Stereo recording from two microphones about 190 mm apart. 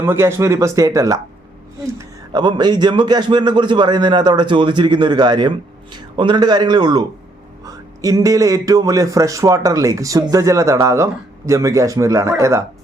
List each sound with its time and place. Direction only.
0.0 s a man's voice: 15° right (ahead or behind)